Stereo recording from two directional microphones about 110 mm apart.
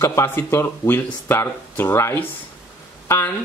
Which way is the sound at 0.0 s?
25° left (ahead or behind).